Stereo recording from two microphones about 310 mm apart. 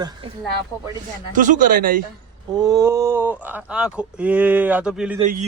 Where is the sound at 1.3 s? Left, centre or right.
Right.